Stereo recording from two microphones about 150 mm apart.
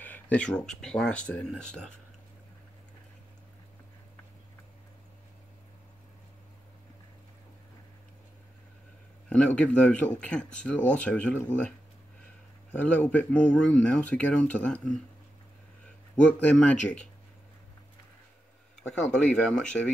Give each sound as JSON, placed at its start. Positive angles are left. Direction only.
{"t": 0.0, "sound": "speech", "side_deg": 10}
{"t": 9.6, "sound": "speech", "side_deg": 10}
{"t": 12.7, "sound": "speech", "side_deg": 10}
{"t": 16.2, "sound": "speech", "side_deg": 10}
{"t": 18.8, "sound": "speech", "side_deg": 5}